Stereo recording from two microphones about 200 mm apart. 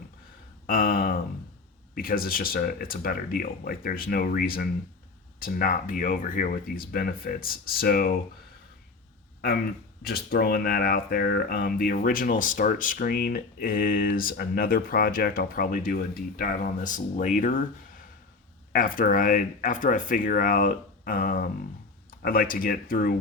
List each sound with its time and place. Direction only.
0.7 s speech: 45° left (ahead or behind)
10.0 s speech: 50° left (ahead or behind)